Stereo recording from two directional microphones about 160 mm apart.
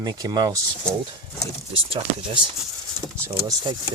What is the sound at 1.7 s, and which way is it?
Speech, 35° right (ahead or behind).